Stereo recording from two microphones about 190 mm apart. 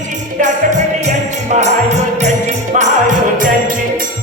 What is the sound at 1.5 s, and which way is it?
Music, 35° right (ahead or behind).